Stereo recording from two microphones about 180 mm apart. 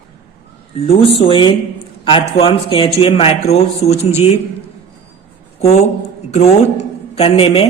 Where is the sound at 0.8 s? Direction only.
30° left (ahead or behind).